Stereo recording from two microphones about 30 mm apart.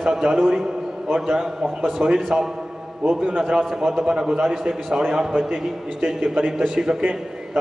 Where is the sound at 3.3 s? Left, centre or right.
Right.